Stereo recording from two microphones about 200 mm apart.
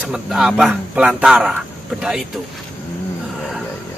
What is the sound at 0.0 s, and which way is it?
Speech, 5° right (ahead or behind).